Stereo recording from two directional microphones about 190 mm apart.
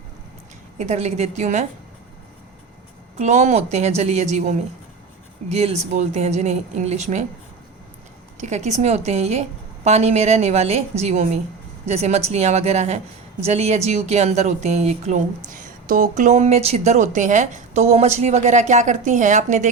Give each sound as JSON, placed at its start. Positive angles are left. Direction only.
{"t": 0.8, "sound": "a woman's voice", "side_deg": -35}
{"t": 3.2, "sound": "a woman's voice", "side_deg": -35}
{"t": 8.4, "sound": "a woman's voice", "side_deg": -40}